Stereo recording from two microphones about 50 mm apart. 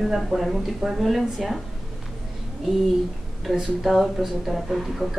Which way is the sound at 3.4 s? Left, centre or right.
Centre.